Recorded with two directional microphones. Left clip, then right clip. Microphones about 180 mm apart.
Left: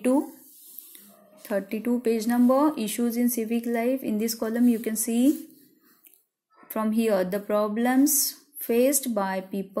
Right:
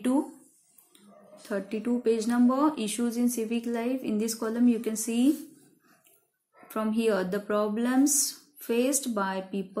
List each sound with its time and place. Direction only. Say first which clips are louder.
1.4 s speech: left 4 dB; 30° left (ahead or behind)
6.7 s speech: left 2 dB; 30° left (ahead or behind)